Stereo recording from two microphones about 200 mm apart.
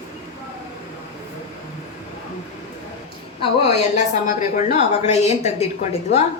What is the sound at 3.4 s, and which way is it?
Speech, 30° left (ahead or behind).